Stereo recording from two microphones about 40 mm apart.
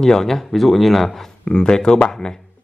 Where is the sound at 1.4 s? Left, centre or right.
Centre.